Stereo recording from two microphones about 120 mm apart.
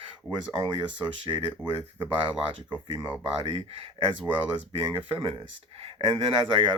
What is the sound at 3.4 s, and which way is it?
Speech, 50° right (ahead or behind).